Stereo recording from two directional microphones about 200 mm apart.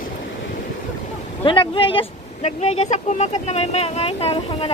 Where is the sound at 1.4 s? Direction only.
25° left (ahead or behind).